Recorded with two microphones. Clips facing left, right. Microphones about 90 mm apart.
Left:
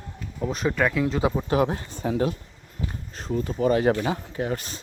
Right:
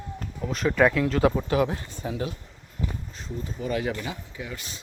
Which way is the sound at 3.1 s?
50° left (ahead or behind).